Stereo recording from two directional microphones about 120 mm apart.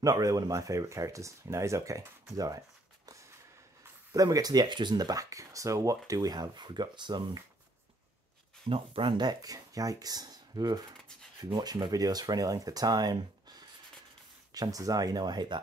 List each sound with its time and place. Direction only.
0.0 s speech: 30° right (ahead or behind)
4.1 s speech: 30° right (ahead or behind)
8.6 s speech: 50° right (ahead or behind)